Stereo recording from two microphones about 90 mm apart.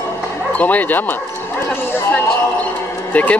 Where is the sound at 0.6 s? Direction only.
20° left (ahead or behind).